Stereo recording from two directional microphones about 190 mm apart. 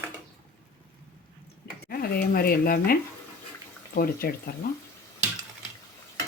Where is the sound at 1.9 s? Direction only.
50° left (ahead or behind).